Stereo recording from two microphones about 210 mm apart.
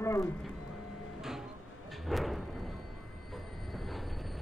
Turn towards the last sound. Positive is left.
turn(degrees=0)  # may be behind; listen again after turning